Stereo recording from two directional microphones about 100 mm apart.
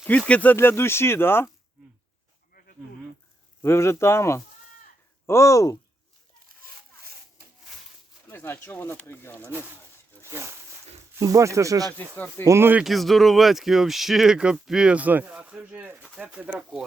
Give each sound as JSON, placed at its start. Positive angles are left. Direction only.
{"t": 0.3, "sound": "speech", "side_deg": 15}
{"t": 0.5, "sound": "speech", "side_deg": 25}
{"t": 3.6, "sound": "speech", "side_deg": 25}
{"t": 8.3, "sound": "speech", "side_deg": 20}
{"t": 9.5, "sound": "speech", "side_deg": -20}
{"t": 12.1, "sound": "speech", "side_deg": 20}
{"t": 12.5, "sound": "speech", "side_deg": -25}
{"t": 12.8, "sound": "speech", "side_deg": 0}